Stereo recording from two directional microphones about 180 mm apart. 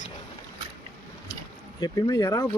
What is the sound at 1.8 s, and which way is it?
Speech, 20° left (ahead or behind).